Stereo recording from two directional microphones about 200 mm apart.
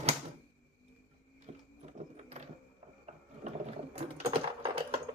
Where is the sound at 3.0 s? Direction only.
35° right (ahead or behind).